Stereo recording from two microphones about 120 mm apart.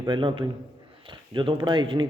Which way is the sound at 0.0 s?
40° right (ahead or behind).